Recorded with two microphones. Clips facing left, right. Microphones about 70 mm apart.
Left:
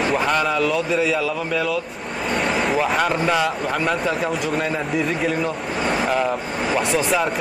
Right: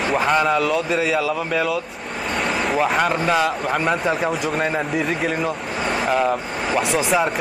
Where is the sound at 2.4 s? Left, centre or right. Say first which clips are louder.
Right 1 dB; centre.